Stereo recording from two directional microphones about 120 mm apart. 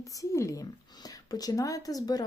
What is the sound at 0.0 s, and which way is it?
Speech, 30° left (ahead or behind).